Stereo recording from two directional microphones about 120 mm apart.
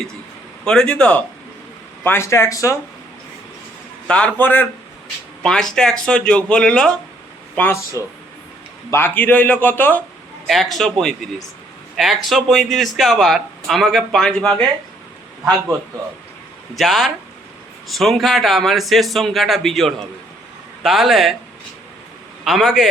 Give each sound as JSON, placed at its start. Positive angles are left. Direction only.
{"t": 0.6, "sound": "a man's voice", "side_deg": 5}
{"t": 2.0, "sound": "speech", "side_deg": 20}
{"t": 4.0, "sound": "a man's voice", "side_deg": 10}
{"t": 8.9, "sound": "a man's voice", "side_deg": 20}
{"t": 10.4, "sound": "a man's voice", "side_deg": 0}
{"t": 16.7, "sound": "a man's voice", "side_deg": 0}
{"t": 22.4, "sound": "a man's voice", "side_deg": 0}